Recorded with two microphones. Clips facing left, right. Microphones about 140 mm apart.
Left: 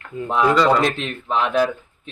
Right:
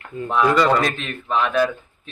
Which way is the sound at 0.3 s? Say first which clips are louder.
Left 1 dB; 25° left (ahead or behind).